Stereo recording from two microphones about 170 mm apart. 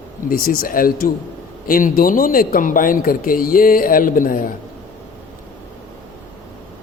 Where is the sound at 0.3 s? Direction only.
60° left (ahead or behind).